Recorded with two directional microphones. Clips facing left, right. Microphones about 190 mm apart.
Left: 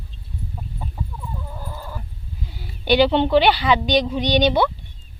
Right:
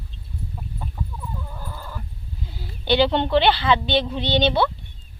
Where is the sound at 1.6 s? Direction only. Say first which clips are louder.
Left 2 dB; 15° left (ahead or behind).